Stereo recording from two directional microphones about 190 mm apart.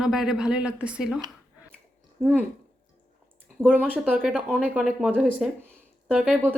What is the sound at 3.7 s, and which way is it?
A woman's voice, 10° right (ahead or behind).